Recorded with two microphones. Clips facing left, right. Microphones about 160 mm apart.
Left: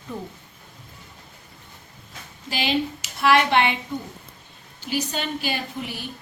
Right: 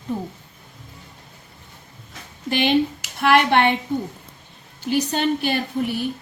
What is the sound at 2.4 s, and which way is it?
A woman's voice, 55° right (ahead or behind).